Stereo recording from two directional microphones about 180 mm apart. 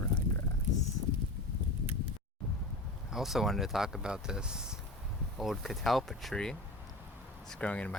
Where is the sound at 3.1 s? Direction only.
Centre (ahead or behind).